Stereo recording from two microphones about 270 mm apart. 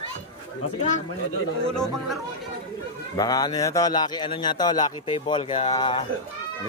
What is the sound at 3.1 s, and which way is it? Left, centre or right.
Speech, centre.